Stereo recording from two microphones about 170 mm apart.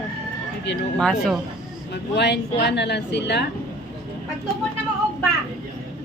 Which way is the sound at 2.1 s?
85° left.